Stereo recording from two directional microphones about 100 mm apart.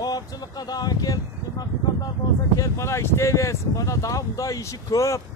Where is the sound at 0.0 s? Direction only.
40° left (ahead or behind).